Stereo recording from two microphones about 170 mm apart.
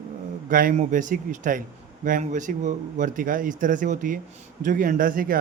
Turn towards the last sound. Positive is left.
turn(degrees=-55)  # may be behind; listen again after turning